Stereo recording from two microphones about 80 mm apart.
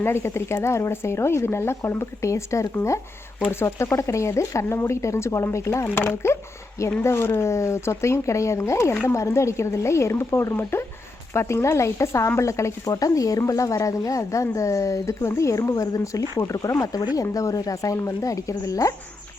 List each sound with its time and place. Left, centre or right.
0.0 s speech: left
5.9 s speech: left